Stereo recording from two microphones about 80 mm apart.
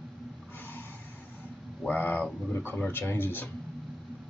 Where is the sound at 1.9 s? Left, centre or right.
Left.